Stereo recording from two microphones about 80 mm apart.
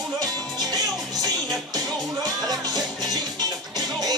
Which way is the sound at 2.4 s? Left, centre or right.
Right.